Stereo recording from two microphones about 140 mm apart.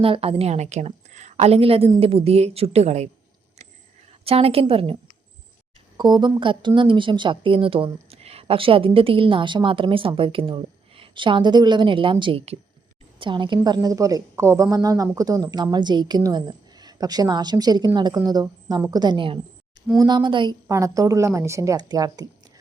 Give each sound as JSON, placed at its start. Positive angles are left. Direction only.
{"t": 0.0, "sound": "a woman's voice", "side_deg": -40}
{"t": 4.2, "sound": "a woman's voice", "side_deg": -45}
{"t": 6.0, "sound": "a woman's voice", "side_deg": -30}
{"t": 20.7, "sound": "a woman's voice", "side_deg": -20}